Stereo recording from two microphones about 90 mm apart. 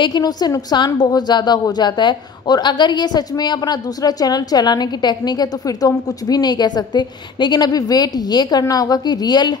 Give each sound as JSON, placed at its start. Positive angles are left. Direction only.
{"t": 0.0, "sound": "a woman's voice", "side_deg": 50}